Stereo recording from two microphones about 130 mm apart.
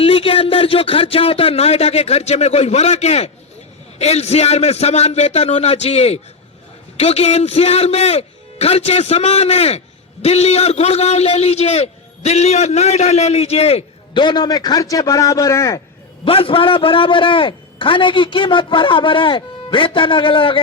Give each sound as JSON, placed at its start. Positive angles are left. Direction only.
{"t": 0.0, "sound": "a man's voice", "side_deg": 45}
{"t": 14.1, "sound": "a man's voice", "side_deg": 35}
{"t": 16.2, "sound": "a man's voice", "side_deg": 45}